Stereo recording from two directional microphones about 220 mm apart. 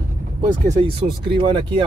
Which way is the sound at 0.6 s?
25° right (ahead or behind).